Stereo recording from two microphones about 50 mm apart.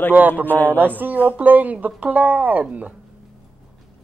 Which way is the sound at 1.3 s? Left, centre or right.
Right.